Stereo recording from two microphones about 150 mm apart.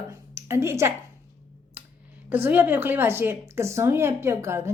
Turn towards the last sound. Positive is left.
turn(degrees=-15)  # may be behind; listen again after turning